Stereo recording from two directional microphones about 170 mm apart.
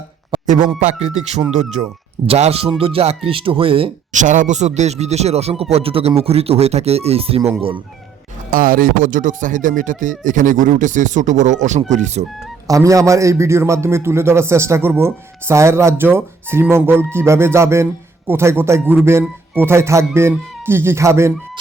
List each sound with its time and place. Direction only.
0.8 s speech: 40° right (ahead or behind)
4.1 s speech: 50° right (ahead or behind)
8.4 s speech: 55° right (ahead or behind)
12.6 s a man's voice: 20° right (ahead or behind)